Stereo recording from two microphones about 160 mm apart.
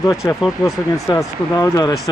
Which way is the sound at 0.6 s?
20° left (ahead or behind).